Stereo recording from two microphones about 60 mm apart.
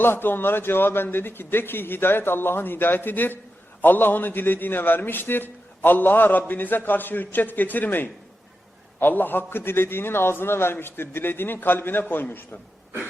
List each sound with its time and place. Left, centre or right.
0.0 s a man's voice: left